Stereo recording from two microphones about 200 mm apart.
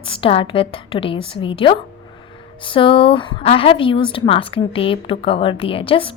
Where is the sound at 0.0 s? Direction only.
25° left (ahead or behind).